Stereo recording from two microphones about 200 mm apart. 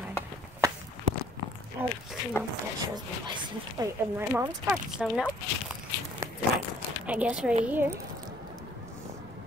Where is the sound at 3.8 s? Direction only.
10° right (ahead or behind).